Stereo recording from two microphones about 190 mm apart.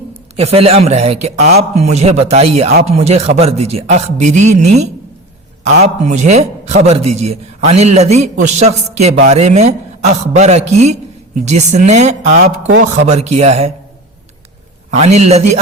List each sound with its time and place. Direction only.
0.3 s a man's voice: 30° right (ahead or behind)
12.4 s speech: 70° right (ahead or behind)
12.9 s a man's voice: 35° right (ahead or behind)
14.9 s a man's voice: 35° right (ahead or behind)